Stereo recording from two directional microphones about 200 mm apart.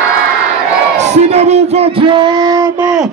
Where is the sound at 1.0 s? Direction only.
35° right (ahead or behind).